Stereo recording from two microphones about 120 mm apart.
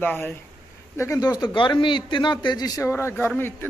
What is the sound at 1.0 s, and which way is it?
A man's voice, 25° left (ahead or behind).